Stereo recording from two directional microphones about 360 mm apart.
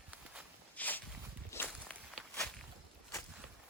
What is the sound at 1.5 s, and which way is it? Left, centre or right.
Walk, centre.